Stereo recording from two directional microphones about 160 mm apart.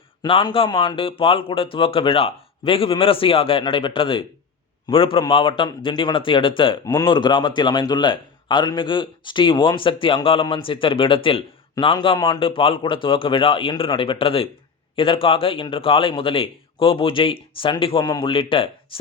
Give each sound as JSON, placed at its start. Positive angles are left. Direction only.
{"t": 0.2, "sound": "a man's voice", "side_deg": 30}